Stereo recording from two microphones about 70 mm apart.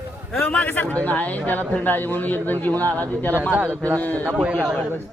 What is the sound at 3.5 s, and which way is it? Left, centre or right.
Speech, right.